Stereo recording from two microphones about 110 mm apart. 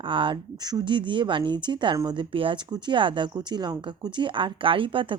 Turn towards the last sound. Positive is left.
turn(degrees=-50)  # may be behind; listen again after turning